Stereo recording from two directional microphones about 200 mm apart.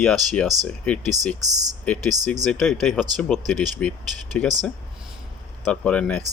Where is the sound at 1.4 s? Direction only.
20° right (ahead or behind).